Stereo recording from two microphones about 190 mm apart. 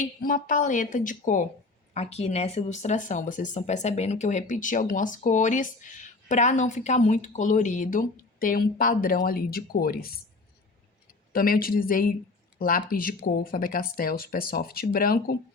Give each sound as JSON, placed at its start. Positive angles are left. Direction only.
{"t": 0.2, "sound": "speech", "side_deg": 45}
{"t": 11.3, "sound": "speech", "side_deg": 50}